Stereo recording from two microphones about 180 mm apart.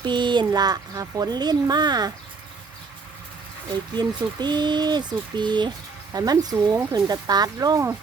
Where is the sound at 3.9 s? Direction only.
25° right (ahead or behind).